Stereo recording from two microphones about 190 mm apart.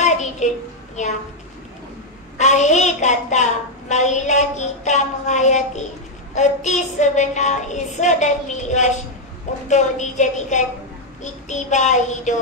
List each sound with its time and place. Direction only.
0.0 s a sound: 40° left (ahead or behind)
1.0 s child singing: 40° left (ahead or behind)
2.3 s child singing: 40° left (ahead or behind)